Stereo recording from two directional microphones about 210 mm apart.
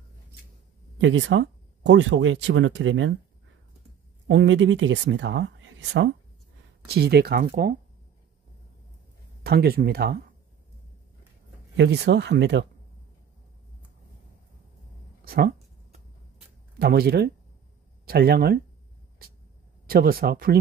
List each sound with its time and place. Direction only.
0.9 s speech: 55° right (ahead or behind)
4.3 s speech: 60° right (ahead or behind)
9.4 s speech: 50° right (ahead or behind)
11.7 s speech: 55° right (ahead or behind)
15.2 s speech: 45° right (ahead or behind)
16.7 s speech: 50° right (ahead or behind)
19.2 s vehicle: 45° right (ahead or behind)
19.9 s speech: 45° right (ahead or behind)